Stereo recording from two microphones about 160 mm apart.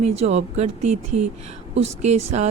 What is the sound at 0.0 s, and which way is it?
A woman's voice, 45° right (ahead or behind).